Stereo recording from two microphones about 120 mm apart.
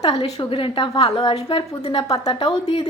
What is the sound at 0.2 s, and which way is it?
Speech, 45° left (ahead or behind).